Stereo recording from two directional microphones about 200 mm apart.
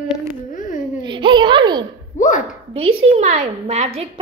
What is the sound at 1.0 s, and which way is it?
Speech, 25° right (ahead or behind).